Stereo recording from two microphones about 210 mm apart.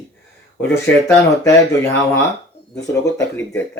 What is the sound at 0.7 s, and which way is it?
Speech, 15° left (ahead or behind).